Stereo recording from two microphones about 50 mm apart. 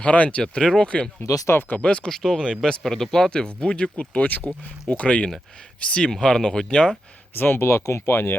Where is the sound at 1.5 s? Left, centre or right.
Left.